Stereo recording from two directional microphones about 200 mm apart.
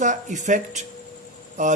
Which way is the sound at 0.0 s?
40° right (ahead or behind).